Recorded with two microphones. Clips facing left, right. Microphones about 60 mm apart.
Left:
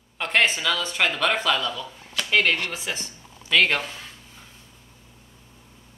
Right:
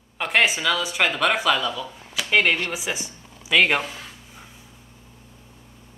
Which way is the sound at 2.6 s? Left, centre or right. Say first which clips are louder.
Right 2 dB; centre.